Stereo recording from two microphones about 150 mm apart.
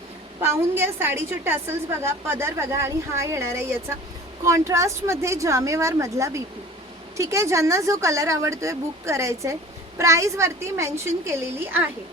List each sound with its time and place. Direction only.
0.4 s a woman's voice: 15° right (ahead or behind)